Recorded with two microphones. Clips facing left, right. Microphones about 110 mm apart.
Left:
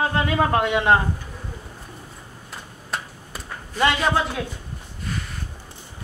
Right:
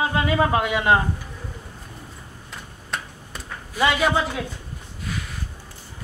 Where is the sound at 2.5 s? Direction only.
5° left (ahead or behind).